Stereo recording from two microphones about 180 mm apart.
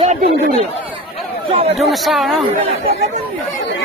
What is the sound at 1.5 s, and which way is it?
Speech, 35° right (ahead or behind).